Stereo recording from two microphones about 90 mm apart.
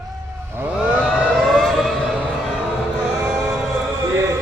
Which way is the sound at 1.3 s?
5° left (ahead or behind).